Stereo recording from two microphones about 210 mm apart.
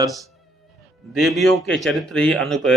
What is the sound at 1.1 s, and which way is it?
A man's voice, centre (ahead or behind).